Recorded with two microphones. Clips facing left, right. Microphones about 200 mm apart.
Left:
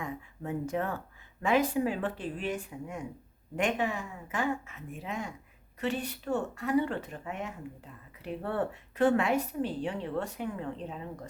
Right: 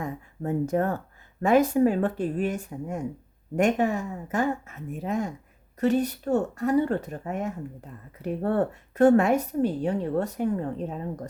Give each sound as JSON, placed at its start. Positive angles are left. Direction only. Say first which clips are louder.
{"t": 0.0, "sound": "a woman's voice", "louder": "right 6 dB", "side_deg": -40}